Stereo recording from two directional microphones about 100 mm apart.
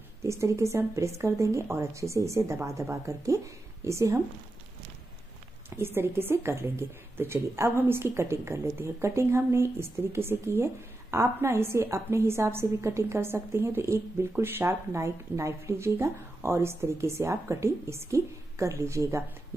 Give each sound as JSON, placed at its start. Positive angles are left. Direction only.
{"t": 0.2, "sound": "speech", "side_deg": -30}
{"t": 5.8, "sound": "speech", "side_deg": -25}